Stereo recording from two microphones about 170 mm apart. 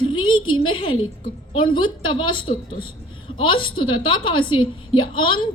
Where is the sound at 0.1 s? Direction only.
30° left (ahead or behind).